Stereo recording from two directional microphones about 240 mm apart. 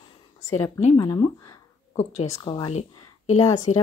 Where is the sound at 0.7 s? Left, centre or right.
Left.